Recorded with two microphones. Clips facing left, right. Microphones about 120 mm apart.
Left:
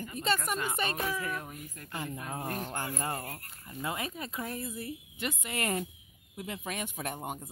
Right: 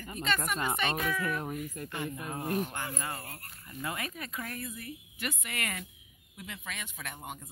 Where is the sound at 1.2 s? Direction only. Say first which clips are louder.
Right 4 dB; 30° right (ahead or behind).